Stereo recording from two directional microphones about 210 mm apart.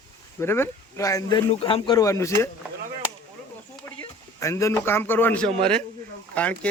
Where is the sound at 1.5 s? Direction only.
25° left (ahead or behind).